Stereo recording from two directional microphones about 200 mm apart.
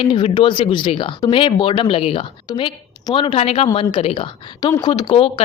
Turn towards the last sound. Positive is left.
turn(degrees=25)  # may be behind; listen again after turning